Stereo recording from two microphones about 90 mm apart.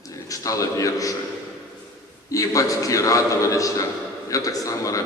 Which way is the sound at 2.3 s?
40° left (ahead or behind).